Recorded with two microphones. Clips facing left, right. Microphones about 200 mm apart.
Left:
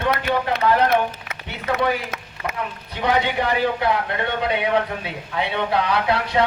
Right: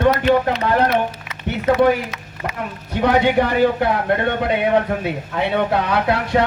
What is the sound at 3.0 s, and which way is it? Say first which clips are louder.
A man's voice: right 5 dB; 45° right (ahead or behind).